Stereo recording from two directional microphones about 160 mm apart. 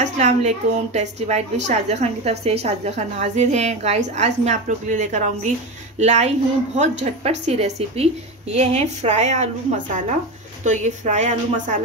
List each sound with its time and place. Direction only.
0.0 s a woman's voice: 45° right (ahead or behind)
10.6 s a woman's voice: 50° right (ahead or behind)